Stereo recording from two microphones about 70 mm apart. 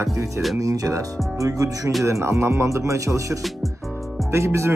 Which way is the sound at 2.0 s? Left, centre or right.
Right.